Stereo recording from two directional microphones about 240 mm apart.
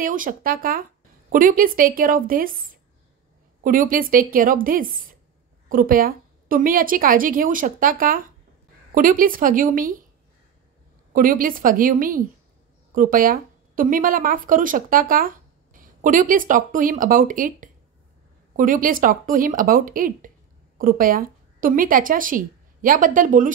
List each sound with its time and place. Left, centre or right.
0.0 s a woman's voice: right
11.1 s a woman's voice: right